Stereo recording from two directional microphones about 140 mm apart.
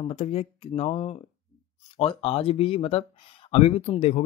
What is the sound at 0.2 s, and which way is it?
Speech, 45° left (ahead or behind).